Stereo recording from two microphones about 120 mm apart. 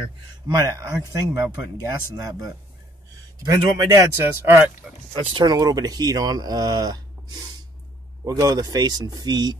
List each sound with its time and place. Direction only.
0.5 s speech: 30° right (ahead or behind)
4.8 s speech: 5° right (ahead or behind)
5.3 s speech: 35° right (ahead or behind)